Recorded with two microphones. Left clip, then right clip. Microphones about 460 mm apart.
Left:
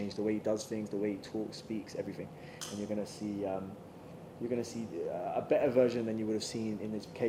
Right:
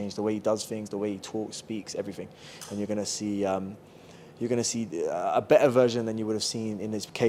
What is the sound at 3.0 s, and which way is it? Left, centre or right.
A man's voice, right.